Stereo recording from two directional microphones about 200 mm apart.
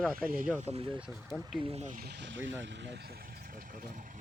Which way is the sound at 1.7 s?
35° right (ahead or behind).